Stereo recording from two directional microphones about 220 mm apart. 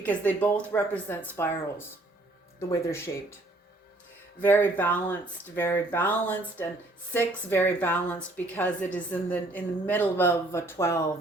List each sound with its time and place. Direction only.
0.0 s a woman's voice: 10° left (ahead or behind)
2.6 s a woman's voice: 15° left (ahead or behind)
4.4 s a woman's voice: 10° left (ahead or behind)